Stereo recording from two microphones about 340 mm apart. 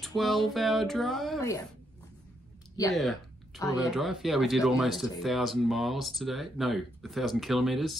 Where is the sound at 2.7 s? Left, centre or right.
Centre.